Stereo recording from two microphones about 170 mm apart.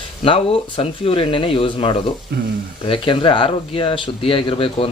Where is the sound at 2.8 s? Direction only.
30° left (ahead or behind).